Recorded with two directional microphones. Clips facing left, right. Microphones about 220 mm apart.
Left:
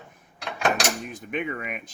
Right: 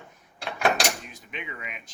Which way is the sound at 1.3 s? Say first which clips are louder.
Left 9 dB; 50° left (ahead or behind).